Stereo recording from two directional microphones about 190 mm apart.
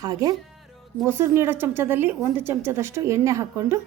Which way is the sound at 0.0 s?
20° right (ahead or behind).